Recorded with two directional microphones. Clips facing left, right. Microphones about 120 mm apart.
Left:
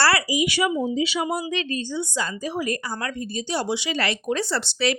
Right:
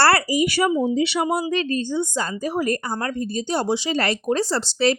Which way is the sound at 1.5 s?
40° right (ahead or behind).